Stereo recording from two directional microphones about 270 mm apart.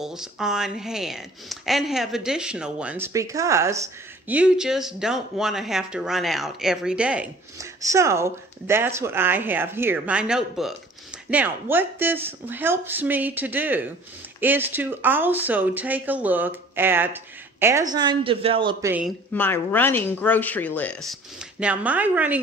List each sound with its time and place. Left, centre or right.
0.0 s speech: centre
19.3 s speech: centre